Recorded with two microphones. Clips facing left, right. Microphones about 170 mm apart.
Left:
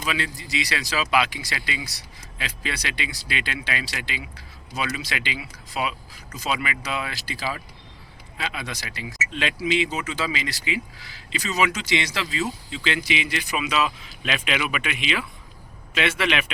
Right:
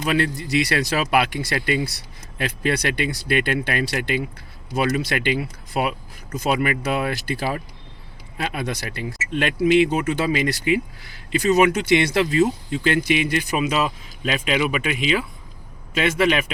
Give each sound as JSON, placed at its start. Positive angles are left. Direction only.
{"t": 0.0, "sound": "speech", "side_deg": -55}
{"t": 0.3, "sound": "speech", "side_deg": 0}
{"t": 0.5, "sound": "speech", "side_deg": -55}